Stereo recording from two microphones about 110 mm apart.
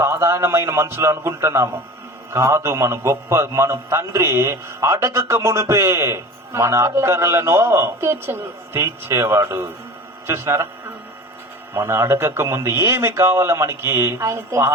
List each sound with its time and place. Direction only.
0.0 s a man's voice: 25° right (ahead or behind)